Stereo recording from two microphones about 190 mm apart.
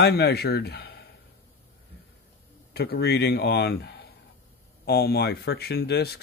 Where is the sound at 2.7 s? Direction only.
55° left (ahead or behind).